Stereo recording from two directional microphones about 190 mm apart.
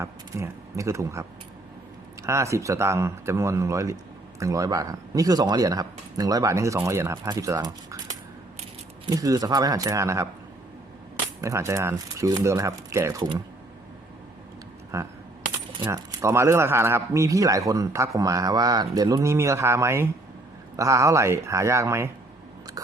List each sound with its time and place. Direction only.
0.0 s speech: 15° right (ahead or behind)
9.0 s speech: 20° right (ahead or behind)
11.3 s speech: 15° right (ahead or behind)
14.9 s speech: 15° right (ahead or behind)